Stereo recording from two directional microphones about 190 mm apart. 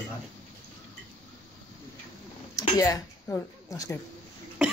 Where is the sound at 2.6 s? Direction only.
20° left (ahead or behind).